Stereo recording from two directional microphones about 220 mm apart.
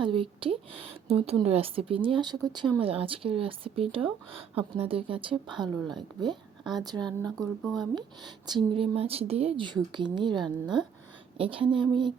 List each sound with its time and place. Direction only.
0.0 s speech: 25° right (ahead or behind)
7.6 s speech: centre (ahead or behind)
7.9 s speech: 20° right (ahead or behind)
10.8 s speech: 5° right (ahead or behind)
11.3 s speech: 25° right (ahead or behind)